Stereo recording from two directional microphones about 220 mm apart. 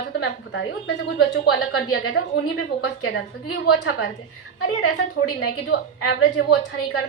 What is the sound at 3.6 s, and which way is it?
Speech, 50° left (ahead or behind).